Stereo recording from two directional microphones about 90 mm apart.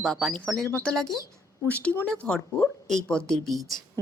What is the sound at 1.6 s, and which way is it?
Speech, 15° left (ahead or behind).